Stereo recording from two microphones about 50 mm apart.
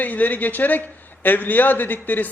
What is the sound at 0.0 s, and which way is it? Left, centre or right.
A man's voice, left.